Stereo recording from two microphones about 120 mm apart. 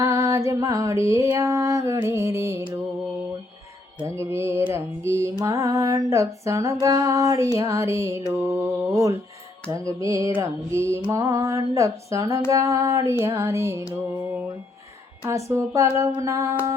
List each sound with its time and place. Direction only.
0.0 s music: 25° right (ahead or behind)
4.0 s music: 25° right (ahead or behind)
15.3 s music: 25° right (ahead or behind)